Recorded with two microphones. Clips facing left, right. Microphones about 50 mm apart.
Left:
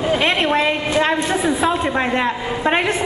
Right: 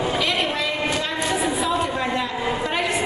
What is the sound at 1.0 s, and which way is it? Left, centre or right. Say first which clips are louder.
A man's voice: left 5 dB; left.